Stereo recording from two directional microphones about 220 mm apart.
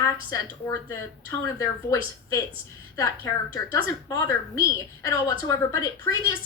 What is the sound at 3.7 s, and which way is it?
A woman's voice, 15° left (ahead or behind).